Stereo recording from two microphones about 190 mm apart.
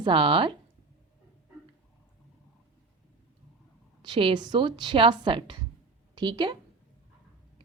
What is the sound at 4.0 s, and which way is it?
Speech, 25° right (ahead or behind).